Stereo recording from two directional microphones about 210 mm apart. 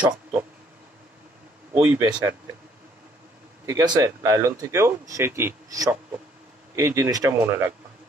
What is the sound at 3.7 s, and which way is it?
Speech, 15° right (ahead or behind).